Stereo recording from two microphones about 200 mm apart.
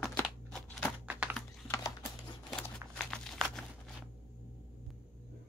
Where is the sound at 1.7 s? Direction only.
15° left (ahead or behind).